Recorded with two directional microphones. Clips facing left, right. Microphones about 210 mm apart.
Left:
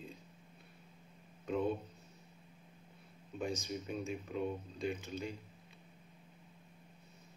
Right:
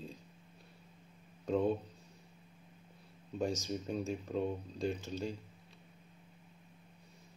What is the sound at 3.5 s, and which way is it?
Speech, centre (ahead or behind).